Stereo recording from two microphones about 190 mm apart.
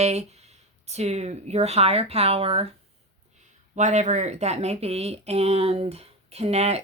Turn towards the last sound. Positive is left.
turn(degrees=-35)  # may be behind; listen again after turning